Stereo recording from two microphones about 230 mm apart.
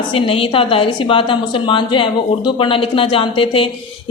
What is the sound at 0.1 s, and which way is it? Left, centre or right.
A woman's voice, left.